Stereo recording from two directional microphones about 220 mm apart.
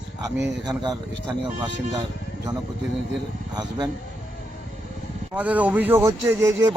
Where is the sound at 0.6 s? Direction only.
20° right (ahead or behind).